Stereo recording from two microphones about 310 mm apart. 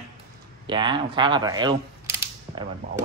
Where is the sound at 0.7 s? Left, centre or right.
Centre.